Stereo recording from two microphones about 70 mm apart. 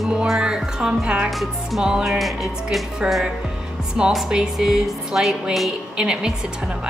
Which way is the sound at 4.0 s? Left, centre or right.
Centre.